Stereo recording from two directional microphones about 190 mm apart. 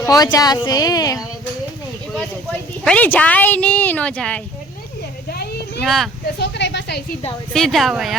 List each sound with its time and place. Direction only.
0.0 s speech: 20° left (ahead or behind)
2.1 s speech: 5° left (ahead or behind)
5.3 s a sound: 55° left (ahead or behind)
5.8 s speech: centre (ahead or behind)
6.4 s a woman's voice: 65° left (ahead or behind)
7.5 s speech: centre (ahead or behind)